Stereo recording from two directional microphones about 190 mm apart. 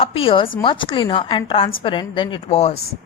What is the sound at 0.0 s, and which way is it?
A woman's voice, 30° left (ahead or behind).